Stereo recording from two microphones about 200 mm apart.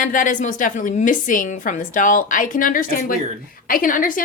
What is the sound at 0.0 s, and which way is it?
A woman's voice, 40° left (ahead or behind).